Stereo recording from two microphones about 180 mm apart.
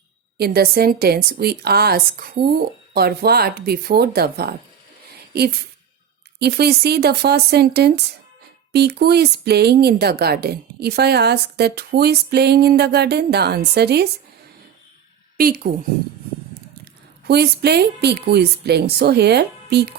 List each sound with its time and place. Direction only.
0.3 s a woman's voice: 60° right (ahead or behind)
15.4 s a woman's voice: 55° right (ahead or behind)
16.8 s a woman's voice: 65° right (ahead or behind)